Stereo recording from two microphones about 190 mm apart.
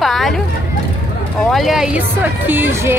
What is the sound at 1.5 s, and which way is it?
Speech, centre (ahead or behind).